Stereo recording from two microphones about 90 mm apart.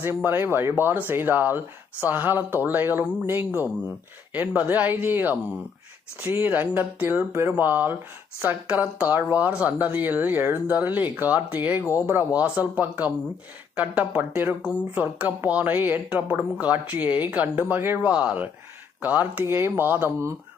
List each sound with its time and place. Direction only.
0.0 s speech: 25° right (ahead or behind)
6.2 s speech: 30° right (ahead or behind)
6.5 s speech: 20° right (ahead or behind)
15.4 s speech: 20° right (ahead or behind)